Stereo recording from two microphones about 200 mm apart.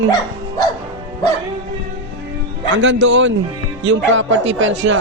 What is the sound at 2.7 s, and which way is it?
A man's voice, 65° right (ahead or behind).